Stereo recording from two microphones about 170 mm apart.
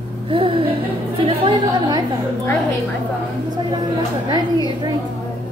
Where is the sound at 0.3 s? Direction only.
30° right (ahead or behind).